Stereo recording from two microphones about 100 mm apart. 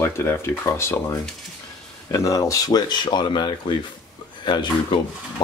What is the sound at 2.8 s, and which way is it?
Speech, 50° left (ahead or behind).